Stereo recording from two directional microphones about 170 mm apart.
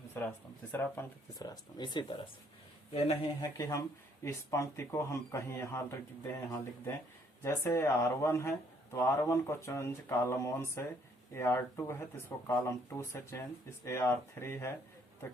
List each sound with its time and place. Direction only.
0.1 s speech: 10° left (ahead or behind); by 2.2 s 25° left (ahead or behind)
2.9 s speech: 35° left (ahead or behind)
3.4 s speech: 20° left (ahead or behind)